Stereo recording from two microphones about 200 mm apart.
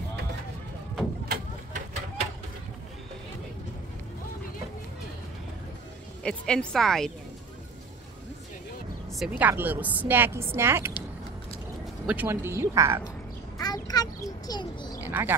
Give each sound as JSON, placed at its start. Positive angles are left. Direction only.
{"t": 1.3, "sound": "a sound", "side_deg": -40}
{"t": 6.2, "sound": "a woman's voice", "side_deg": 5}
{"t": 9.1, "sound": "a woman's voice", "side_deg": -5}
{"t": 12.1, "sound": "a woman's voice", "side_deg": -10}
{"t": 13.6, "sound": "a sound", "side_deg": 20}
{"t": 14.5, "sound": "speech", "side_deg": 20}
{"t": 15.0, "sound": "speech", "side_deg": -10}